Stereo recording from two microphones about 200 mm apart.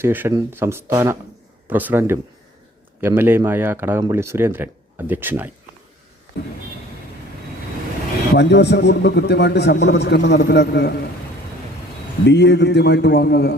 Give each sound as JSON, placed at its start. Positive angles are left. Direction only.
{"t": 0.0, "sound": "speech", "side_deg": -10}
{"t": 8.4, "sound": "a man's voice", "side_deg": 60}
{"t": 12.2, "sound": "a man's voice", "side_deg": 60}